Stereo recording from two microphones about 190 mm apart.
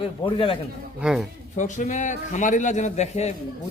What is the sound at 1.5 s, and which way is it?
A man's voice, 40° left (ahead or behind).